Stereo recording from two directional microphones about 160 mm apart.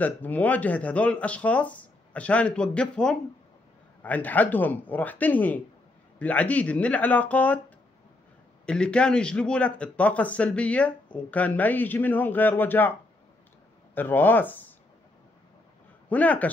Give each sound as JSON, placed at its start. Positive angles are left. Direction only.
{"t": 0.0, "sound": "a man's voice", "side_deg": 10}
{"t": 8.6, "sound": "a man's voice", "side_deg": 5}
{"t": 13.9, "sound": "a man's voice", "side_deg": 10}
{"t": 16.1, "sound": "a man's voice", "side_deg": 10}